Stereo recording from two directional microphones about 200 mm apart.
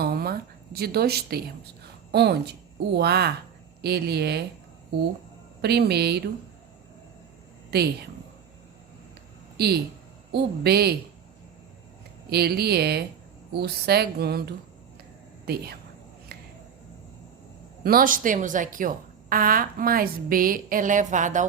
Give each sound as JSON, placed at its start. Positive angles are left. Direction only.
{"t": 0.0, "sound": "speech", "side_deg": -50}
{"t": 5.6, "sound": "speech", "side_deg": -55}
{"t": 7.7, "sound": "speech", "side_deg": -55}
{"t": 9.6, "sound": "a woman's voice", "side_deg": -50}
{"t": 12.3, "sound": "a woman's voice", "side_deg": -50}
{"t": 17.8, "sound": "a woman's voice", "side_deg": -45}